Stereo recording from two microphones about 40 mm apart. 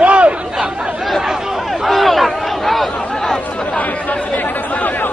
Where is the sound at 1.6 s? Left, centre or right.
Centre.